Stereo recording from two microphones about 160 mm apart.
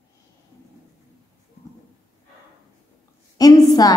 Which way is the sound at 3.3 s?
25° left (ahead or behind).